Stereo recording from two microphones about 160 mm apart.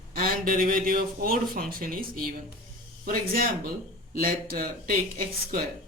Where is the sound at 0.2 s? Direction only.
65° right (ahead or behind).